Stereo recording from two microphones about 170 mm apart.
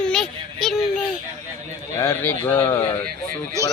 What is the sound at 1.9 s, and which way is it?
Speech, 15° left (ahead or behind).